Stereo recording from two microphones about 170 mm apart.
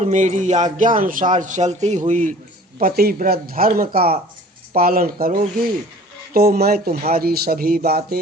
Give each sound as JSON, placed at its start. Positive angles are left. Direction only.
{"t": 0.0, "sound": "speech", "side_deg": -45}
{"t": 2.7, "sound": "speech", "side_deg": -60}